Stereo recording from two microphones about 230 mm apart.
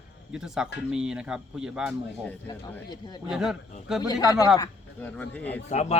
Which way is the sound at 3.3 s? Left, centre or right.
Centre.